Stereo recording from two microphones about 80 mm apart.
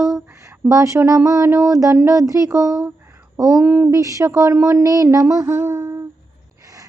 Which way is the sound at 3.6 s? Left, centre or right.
Right.